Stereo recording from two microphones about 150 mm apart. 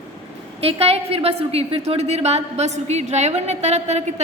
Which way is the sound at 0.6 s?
40° right (ahead or behind).